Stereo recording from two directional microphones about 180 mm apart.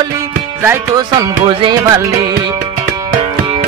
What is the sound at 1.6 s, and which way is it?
Music, 25° right (ahead or behind).